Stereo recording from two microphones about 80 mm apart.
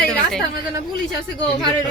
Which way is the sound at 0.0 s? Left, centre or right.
Centre.